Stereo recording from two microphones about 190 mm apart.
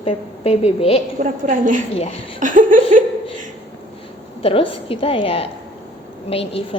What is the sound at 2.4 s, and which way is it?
Laughter, 45° right (ahead or behind).